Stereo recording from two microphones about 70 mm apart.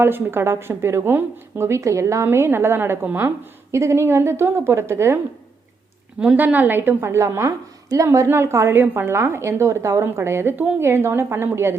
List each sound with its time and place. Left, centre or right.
0.0 s a woman's voice: right
3.7 s a woman's voice: right
6.3 s a woman's voice: right